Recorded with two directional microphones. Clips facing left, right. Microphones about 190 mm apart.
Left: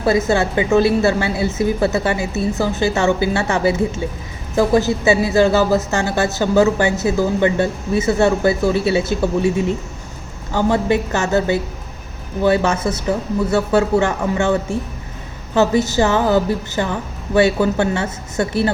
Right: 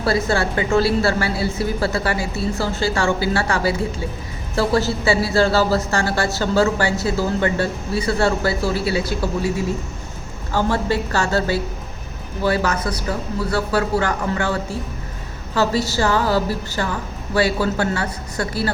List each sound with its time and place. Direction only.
0.0 s speech: 20° left (ahead or behind)